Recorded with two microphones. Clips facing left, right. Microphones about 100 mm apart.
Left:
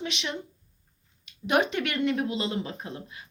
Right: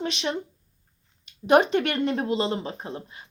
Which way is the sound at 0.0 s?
35° right (ahead or behind).